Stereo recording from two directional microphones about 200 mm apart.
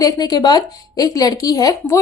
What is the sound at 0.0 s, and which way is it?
A woman's voice, 20° left (ahead or behind).